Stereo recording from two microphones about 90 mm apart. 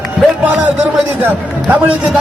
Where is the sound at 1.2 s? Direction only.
15° right (ahead or behind).